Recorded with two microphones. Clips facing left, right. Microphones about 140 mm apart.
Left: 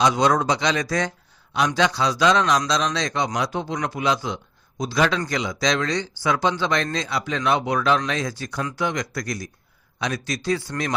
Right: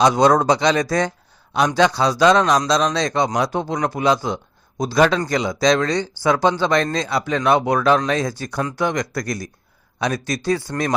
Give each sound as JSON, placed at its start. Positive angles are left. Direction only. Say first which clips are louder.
{"t": 0.0, "sound": "a man's voice", "louder": "right 5 dB", "side_deg": -40}